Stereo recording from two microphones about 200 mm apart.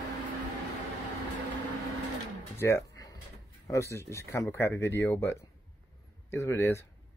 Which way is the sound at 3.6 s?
15° left (ahead or behind).